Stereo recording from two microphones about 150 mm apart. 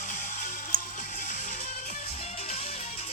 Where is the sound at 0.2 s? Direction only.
55° left (ahead or behind).